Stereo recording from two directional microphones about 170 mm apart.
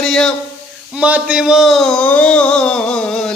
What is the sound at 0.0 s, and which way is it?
Speech, 5° left (ahead or behind).